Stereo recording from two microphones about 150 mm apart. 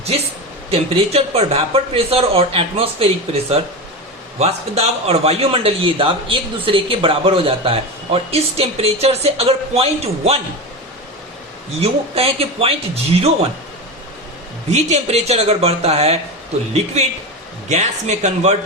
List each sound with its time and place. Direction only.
0.7 s a man's voice: 40° right (ahead or behind)
11.8 s a man's voice: 40° right (ahead or behind)
14.7 s speech: 45° right (ahead or behind)